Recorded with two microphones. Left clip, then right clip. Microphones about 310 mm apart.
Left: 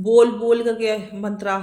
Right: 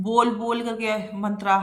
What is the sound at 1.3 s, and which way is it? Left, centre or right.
Speech, centre.